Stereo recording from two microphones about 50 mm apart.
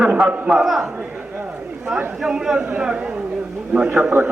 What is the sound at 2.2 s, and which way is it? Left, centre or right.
Speech, centre.